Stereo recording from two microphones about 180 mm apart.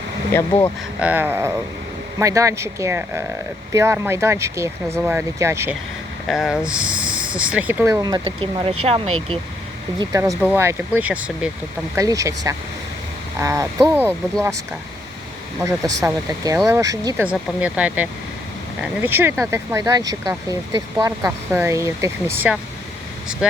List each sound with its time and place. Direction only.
0.9 s speech: 10° right (ahead or behind)
6.2 s speech: centre (ahead or behind); by 9.4 s 30° right (ahead or behind)
10.0 s speech: 15° right (ahead or behind)
15.6 s speech: 20° right (ahead or behind)
17.2 s speech: 5° right (ahead or behind)